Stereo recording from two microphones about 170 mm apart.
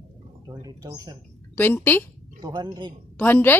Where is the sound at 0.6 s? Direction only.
20° right (ahead or behind).